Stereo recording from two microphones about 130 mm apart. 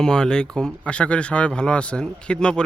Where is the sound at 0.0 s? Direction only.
5° left (ahead or behind).